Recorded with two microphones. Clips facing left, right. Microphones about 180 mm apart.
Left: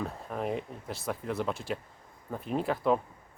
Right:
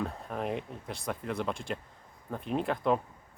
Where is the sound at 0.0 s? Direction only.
Centre (ahead or behind).